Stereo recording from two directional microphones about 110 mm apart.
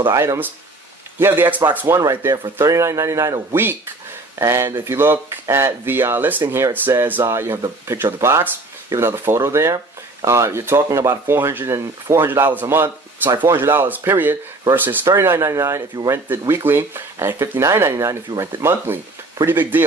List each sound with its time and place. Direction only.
0.1 s speech: 25° right (ahead or behind)
2.0 s speech: 30° right (ahead or behind)